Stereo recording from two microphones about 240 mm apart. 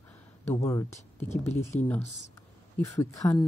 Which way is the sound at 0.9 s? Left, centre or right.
Left.